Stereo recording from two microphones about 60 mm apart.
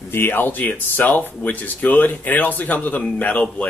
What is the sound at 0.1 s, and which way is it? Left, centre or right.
A man's voice, left.